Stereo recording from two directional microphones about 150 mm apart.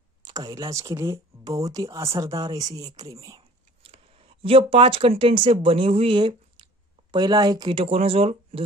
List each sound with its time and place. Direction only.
0.2 s speech: 25° right (ahead or behind)
3.8 s speech: 40° right (ahead or behind)